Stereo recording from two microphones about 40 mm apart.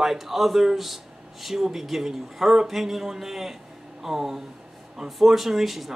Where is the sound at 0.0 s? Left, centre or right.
Centre.